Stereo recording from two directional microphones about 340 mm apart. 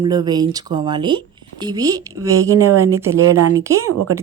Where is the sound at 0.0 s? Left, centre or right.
Centre.